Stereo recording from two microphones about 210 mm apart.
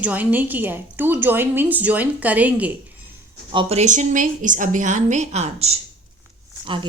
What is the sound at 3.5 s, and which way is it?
A woman's voice, 30° right (ahead or behind).